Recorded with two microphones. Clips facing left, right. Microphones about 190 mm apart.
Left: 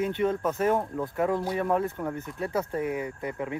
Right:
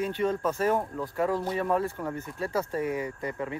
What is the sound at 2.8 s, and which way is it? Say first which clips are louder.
Speech: even; 10° left (ahead or behind).